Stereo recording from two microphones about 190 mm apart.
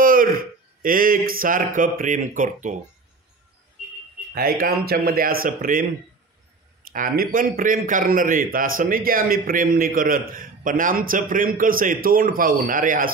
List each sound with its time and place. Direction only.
0.0 s speech: 50° right (ahead or behind)
4.3 s a man's voice: 50° right (ahead or behind)
6.9 s a man's voice: 45° right (ahead or behind)